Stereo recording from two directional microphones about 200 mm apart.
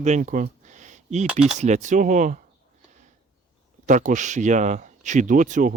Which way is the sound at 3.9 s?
40° right (ahead or behind).